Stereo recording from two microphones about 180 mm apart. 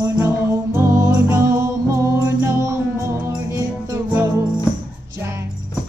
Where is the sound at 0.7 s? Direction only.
15° right (ahead or behind).